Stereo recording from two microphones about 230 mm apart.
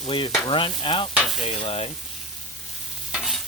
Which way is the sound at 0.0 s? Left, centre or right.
Left.